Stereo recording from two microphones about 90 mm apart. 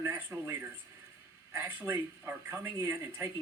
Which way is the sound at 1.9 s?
25° right (ahead or behind).